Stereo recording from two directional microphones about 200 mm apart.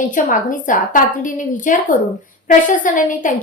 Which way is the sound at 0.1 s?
40° left (ahead or behind).